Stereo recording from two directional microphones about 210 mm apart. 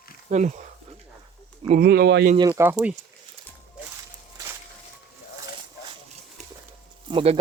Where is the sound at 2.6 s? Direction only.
10° right (ahead or behind).